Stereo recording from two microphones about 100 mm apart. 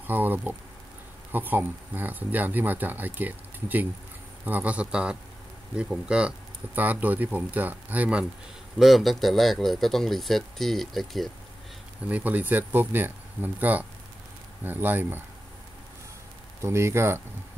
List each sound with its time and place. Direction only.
0.0 s speech: 20° right (ahead or behind)
8.7 s speech: centre (ahead or behind)
12.1 s speech: 15° right (ahead or behind)
16.6 s speech: 25° right (ahead or behind)